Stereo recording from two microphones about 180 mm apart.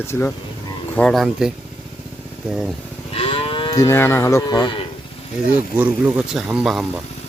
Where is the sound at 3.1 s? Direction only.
30° left (ahead or behind).